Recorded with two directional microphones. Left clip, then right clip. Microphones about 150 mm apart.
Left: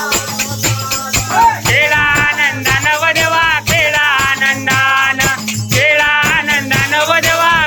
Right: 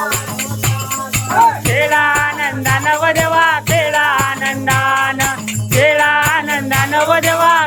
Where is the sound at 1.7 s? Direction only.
25° right (ahead or behind).